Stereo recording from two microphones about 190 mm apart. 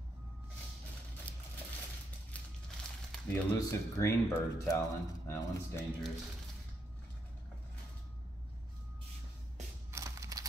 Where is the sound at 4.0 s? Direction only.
15° left (ahead or behind).